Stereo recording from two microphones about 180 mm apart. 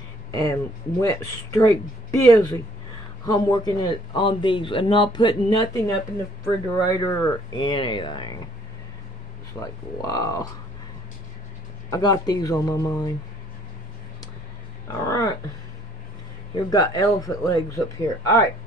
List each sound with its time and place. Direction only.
0.3 s speech: 20° left (ahead or behind)
9.6 s speech: 20° left (ahead or behind)
11.9 s speech: 20° left (ahead or behind)
15.0 s speech: 20° left (ahead or behind)
16.5 s speech: 20° left (ahead or behind)